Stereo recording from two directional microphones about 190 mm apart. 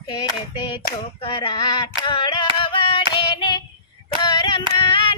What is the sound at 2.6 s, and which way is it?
Hands, 30° left (ahead or behind).